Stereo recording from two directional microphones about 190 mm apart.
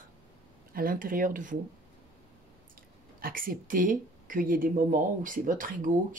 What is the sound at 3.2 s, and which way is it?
Speech, 50° right (ahead or behind).